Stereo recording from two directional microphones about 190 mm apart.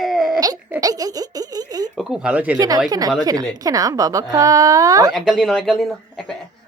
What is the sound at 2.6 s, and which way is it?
A woman's voice, 20° right (ahead or behind).